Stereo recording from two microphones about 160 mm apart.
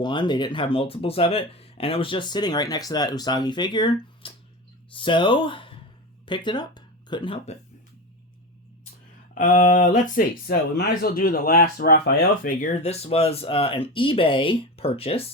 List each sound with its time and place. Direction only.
0.0 s speech: 30° left (ahead or behind)
9.3 s speech: 55° left (ahead or behind); by 15.3 s 35° left (ahead or behind)